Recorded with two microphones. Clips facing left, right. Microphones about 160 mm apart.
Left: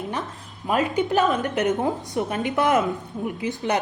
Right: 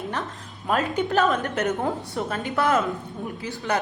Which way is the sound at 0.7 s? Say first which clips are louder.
Left 2 dB; 10° left (ahead or behind).